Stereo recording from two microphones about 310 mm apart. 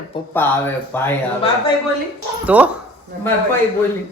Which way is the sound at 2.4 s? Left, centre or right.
Centre.